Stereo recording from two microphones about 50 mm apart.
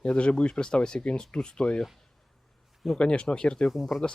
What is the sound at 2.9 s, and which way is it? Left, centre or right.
Speech, left.